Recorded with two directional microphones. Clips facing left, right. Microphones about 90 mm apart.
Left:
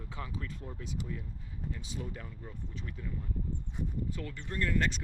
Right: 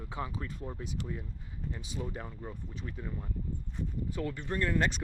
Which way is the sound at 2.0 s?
30° right (ahead or behind).